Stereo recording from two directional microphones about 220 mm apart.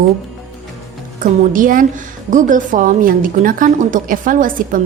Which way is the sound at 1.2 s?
40° right (ahead or behind).